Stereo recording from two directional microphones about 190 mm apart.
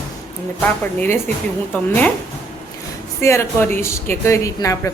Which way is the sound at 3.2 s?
15° left (ahead or behind).